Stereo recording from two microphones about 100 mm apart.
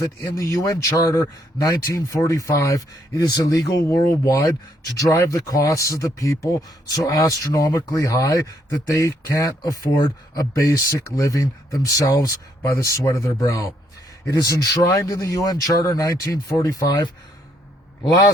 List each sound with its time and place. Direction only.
0.0 s speech: 35° left (ahead or behind)